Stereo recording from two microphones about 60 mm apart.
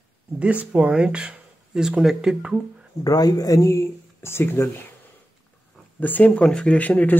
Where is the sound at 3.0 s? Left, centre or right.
Left.